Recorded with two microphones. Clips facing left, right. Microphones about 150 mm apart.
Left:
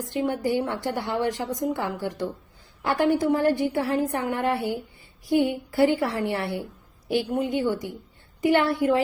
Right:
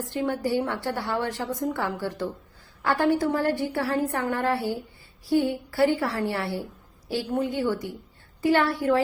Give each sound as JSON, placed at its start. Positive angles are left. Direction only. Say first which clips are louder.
{"t": 0.0, "sound": "a woman's voice", "louder": "left 1 dB", "side_deg": 20}